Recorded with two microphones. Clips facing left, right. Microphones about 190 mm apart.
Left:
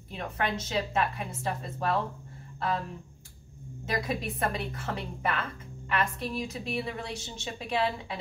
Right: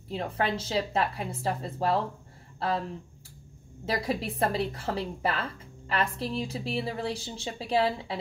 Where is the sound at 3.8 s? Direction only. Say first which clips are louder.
Right 2 dB; 30° right (ahead or behind).